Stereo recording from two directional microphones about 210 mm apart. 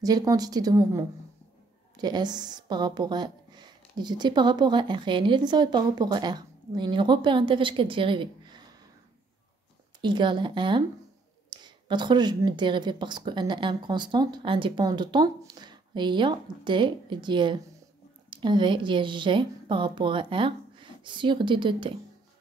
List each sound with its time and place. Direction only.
0.0 s a woman's voice: 20° right (ahead or behind)
10.0 s a woman's voice: 20° right (ahead or behind)